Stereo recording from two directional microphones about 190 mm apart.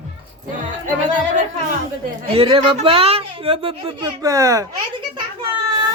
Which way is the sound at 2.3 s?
30° right (ahead or behind).